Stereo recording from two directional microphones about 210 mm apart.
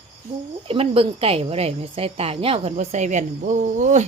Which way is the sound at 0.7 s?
25° right (ahead or behind).